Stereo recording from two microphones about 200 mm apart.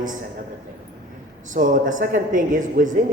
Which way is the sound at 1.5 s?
40° right (ahead or behind).